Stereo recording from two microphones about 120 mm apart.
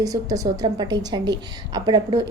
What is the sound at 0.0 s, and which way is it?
A woman's voice, 30° right (ahead or behind).